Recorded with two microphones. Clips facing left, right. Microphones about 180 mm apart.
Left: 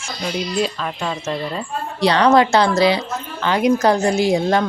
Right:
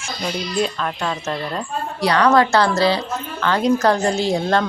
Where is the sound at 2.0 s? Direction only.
25° left (ahead or behind).